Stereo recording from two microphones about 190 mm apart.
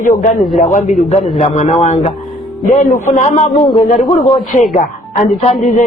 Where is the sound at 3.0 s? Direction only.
40° left (ahead or behind).